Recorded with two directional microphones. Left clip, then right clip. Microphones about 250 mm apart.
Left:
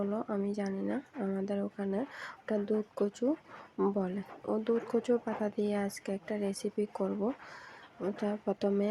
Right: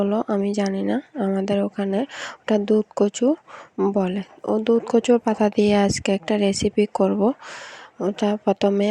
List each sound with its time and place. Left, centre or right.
0.0 s speech: right